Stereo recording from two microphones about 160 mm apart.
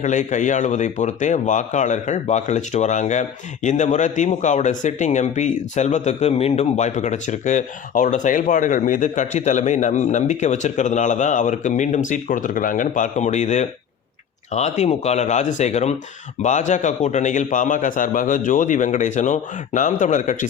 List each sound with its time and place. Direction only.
0.0 s speech: 50° left (ahead or behind)